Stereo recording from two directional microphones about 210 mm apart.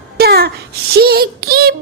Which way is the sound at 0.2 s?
50° right (ahead or behind).